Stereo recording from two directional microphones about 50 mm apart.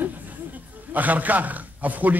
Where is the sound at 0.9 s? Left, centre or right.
Right.